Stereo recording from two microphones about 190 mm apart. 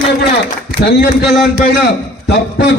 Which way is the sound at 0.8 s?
60° left (ahead or behind).